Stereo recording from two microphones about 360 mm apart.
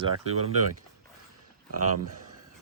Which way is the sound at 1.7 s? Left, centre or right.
Right.